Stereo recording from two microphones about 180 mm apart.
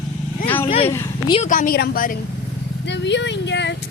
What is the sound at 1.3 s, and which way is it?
Speech, 45° left (ahead or behind).